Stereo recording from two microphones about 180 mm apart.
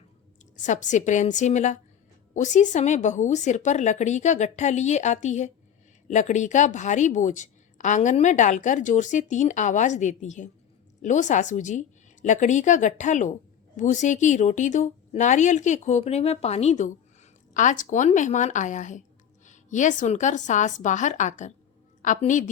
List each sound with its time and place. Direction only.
0.6 s a woman's voice: 45° left (ahead or behind)